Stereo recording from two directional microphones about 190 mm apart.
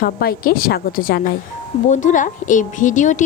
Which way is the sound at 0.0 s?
50° left (ahead or behind).